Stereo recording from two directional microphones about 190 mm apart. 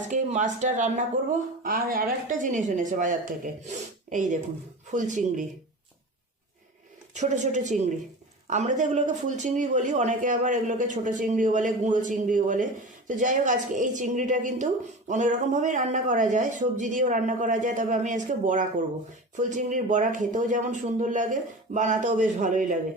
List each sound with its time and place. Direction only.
0.1 s a woman's voice: 40° right (ahead or behind)
7.1 s a woman's voice: 40° right (ahead or behind)